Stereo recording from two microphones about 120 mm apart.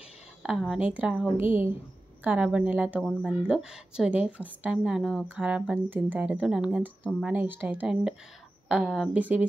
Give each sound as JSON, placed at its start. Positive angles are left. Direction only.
{"t": 0.4, "sound": "speech", "side_deg": -5}
{"t": 1.3, "sound": "a woman's voice", "side_deg": -15}
{"t": 3.0, "sound": "a woman's voice", "side_deg": 0}
{"t": 7.3, "sound": "a woman's voice", "side_deg": -15}
{"t": 9.1, "sound": "a woman's voice", "side_deg": -10}